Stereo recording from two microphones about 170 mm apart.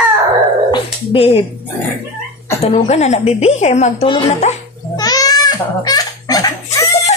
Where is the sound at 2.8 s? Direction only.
40° left (ahead or behind).